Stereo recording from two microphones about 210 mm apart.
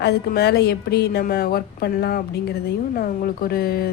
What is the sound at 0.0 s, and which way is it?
Speech, 50° left (ahead or behind).